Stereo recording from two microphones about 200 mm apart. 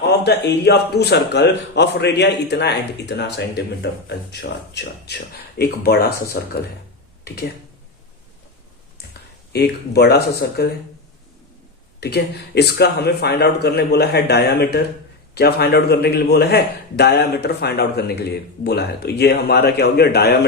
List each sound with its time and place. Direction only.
0.0 s a man's voice: 55° left (ahead or behind)
9.5 s speech: 50° left (ahead or behind)
11.9 s a man's voice: 55° left (ahead or behind)